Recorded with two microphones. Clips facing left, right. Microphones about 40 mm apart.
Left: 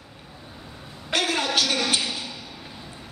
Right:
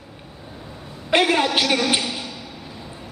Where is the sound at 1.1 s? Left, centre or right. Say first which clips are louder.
Right 7 dB; right.